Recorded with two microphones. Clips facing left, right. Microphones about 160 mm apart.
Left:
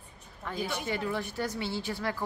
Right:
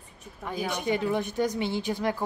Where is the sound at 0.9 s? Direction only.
20° right (ahead or behind).